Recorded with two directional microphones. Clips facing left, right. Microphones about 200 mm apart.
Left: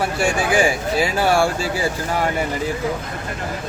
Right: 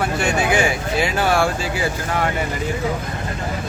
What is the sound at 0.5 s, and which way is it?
Speech, 30° left (ahead or behind).